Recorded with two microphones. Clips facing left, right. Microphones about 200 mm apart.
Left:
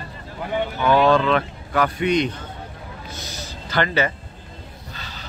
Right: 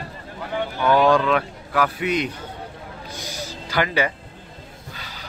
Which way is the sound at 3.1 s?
10° right (ahead or behind).